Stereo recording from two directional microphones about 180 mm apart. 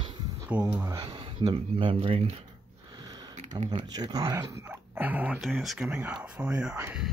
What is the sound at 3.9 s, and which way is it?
Speech, 20° right (ahead or behind).